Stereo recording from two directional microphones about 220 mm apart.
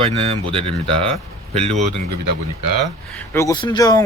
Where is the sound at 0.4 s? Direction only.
25° right (ahead or behind).